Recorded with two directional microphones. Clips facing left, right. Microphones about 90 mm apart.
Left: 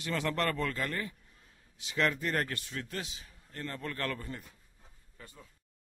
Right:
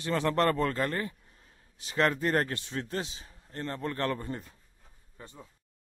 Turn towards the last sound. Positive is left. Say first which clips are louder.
# right 4 dB
turn(degrees=-25)  # may be behind; listen again after turning